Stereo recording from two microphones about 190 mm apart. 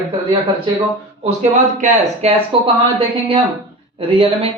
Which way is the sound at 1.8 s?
40° right (ahead or behind).